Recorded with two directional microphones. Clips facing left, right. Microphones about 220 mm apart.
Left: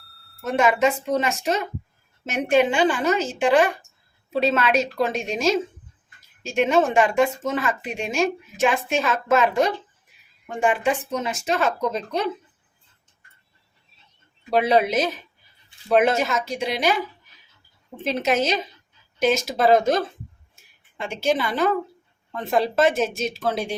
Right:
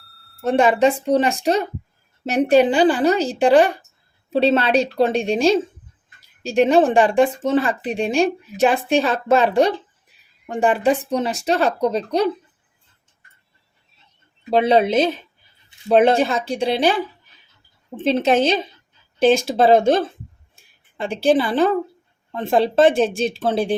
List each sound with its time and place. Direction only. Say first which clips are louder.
0.0 s smoke detector: right 1 dB; centre (ahead or behind)
0.4 s speech: right 4 dB; 30° right (ahead or behind)
14.5 s speech: right 4 dB; 25° right (ahead or behind)
18.0 s speech: right 6 dB; 30° right (ahead or behind)